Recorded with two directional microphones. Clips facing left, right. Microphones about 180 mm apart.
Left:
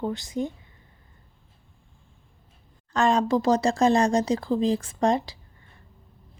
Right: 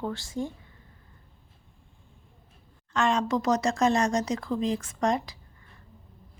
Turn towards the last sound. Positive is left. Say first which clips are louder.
# left 4 dB
turn(degrees=30)  # may be behind; listen again after turning